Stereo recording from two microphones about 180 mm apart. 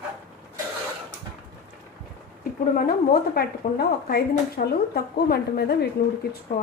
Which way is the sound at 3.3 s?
60° left (ahead or behind).